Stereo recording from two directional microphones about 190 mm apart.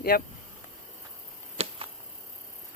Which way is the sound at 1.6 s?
30° right (ahead or behind).